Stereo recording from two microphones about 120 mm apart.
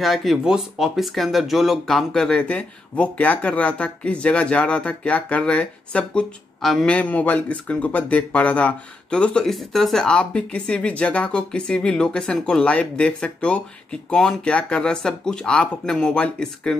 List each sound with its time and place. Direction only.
0.0 s speech: centre (ahead or behind)